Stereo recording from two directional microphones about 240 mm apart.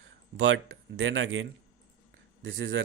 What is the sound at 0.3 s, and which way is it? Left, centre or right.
Speech, right.